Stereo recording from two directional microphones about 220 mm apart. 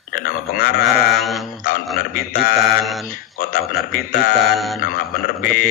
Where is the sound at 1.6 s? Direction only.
40° left (ahead or behind).